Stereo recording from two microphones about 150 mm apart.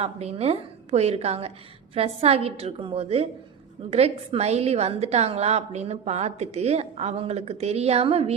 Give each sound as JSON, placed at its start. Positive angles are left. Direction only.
{"t": 0.0, "sound": "a woman's voice", "side_deg": -45}